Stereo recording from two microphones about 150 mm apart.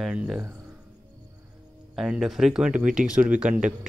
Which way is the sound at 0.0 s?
5° right (ahead or behind).